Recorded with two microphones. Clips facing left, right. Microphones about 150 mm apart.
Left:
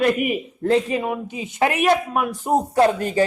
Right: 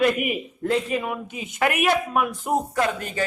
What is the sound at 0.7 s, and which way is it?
A man's voice, 30° left (ahead or behind).